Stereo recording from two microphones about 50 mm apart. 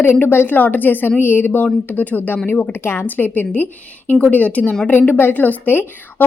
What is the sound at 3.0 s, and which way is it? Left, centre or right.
Speech, left.